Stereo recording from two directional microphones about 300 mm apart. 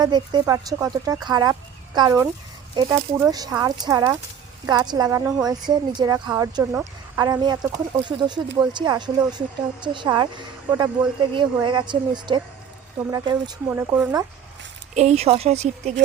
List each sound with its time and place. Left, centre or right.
0.0 s a woman's voice: centre
14.9 s speech: right